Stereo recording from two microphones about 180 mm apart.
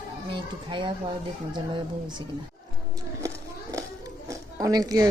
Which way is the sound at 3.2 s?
15° right (ahead or behind).